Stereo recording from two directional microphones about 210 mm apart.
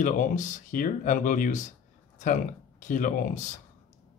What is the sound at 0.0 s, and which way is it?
Speech, 35° left (ahead or behind).